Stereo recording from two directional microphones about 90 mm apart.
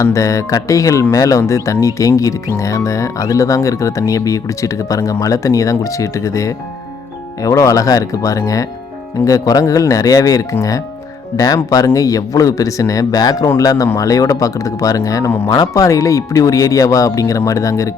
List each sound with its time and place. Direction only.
0.0 s speech: 35° left (ahead or behind)